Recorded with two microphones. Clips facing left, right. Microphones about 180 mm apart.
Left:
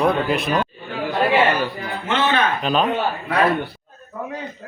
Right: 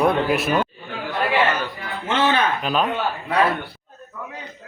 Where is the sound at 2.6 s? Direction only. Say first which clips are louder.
Left 2 dB; 5° right (ahead or behind).